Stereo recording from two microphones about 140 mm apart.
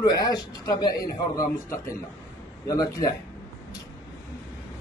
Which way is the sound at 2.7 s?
25° left (ahead or behind).